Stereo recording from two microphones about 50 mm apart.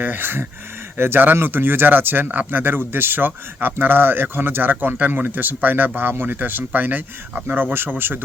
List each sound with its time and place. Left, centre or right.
0.0 s speech: right